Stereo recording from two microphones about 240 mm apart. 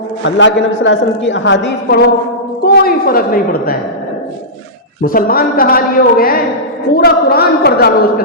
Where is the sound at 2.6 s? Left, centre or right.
Left.